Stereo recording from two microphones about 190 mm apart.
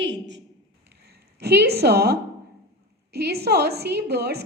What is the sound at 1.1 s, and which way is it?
A woman's voice, 60° right (ahead or behind).